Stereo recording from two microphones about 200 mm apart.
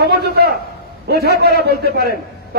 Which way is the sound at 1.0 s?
55° right (ahead or behind).